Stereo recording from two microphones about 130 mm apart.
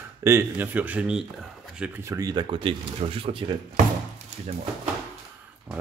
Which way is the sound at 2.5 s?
45° right (ahead or behind).